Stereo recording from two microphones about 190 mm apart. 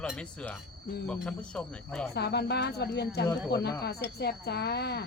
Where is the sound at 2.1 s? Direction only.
60° left (ahead or behind).